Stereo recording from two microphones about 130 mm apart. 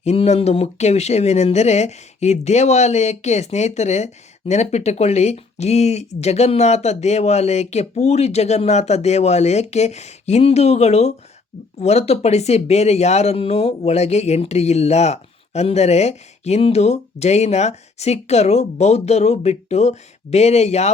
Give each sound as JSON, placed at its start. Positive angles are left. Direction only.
{"t": 0.0, "sound": "speech", "side_deg": 55}